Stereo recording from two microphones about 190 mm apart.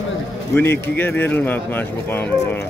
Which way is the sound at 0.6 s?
10° left (ahead or behind).